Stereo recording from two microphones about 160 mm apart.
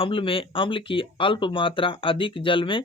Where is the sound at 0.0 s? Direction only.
35° left (ahead or behind).